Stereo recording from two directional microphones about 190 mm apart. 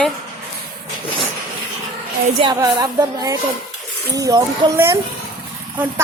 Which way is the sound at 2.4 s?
20° right (ahead or behind).